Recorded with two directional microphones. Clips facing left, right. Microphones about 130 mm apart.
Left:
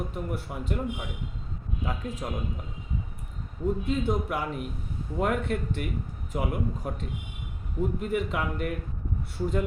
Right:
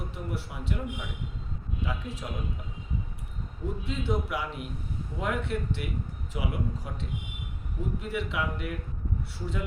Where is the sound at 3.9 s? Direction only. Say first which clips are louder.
Right 1 dB; 45° left (ahead or behind).